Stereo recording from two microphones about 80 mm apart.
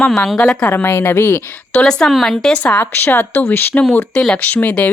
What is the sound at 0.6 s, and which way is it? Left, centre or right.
Speech, left.